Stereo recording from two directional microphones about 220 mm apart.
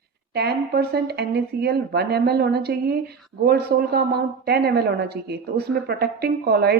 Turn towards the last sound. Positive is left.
turn(degrees=-45)  # may be behind; listen again after turning